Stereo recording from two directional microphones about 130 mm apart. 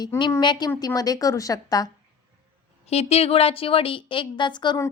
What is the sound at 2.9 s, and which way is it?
A woman's voice, 50° left (ahead or behind).